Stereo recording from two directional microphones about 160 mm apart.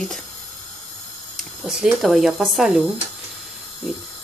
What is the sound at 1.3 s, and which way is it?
Speech, 5° right (ahead or behind).